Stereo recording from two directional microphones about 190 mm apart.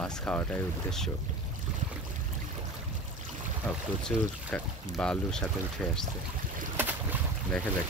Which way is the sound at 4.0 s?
5° left (ahead or behind).